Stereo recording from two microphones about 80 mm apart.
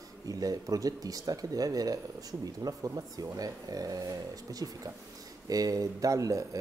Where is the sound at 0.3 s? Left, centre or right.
Right.